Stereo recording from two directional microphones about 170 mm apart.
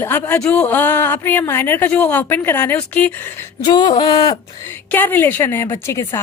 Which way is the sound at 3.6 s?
25° left (ahead or behind).